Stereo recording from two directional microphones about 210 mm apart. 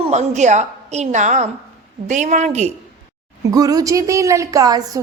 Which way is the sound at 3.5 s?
15° right (ahead or behind).